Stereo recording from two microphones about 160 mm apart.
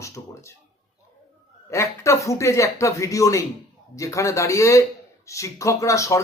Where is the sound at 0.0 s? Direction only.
20° left (ahead or behind).